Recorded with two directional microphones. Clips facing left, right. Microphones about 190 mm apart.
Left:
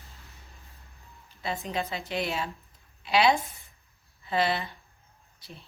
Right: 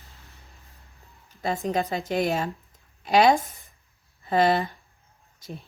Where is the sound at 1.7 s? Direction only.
40° right (ahead or behind).